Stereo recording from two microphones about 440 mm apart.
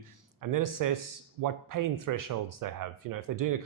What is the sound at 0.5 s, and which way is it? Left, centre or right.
Speech, right.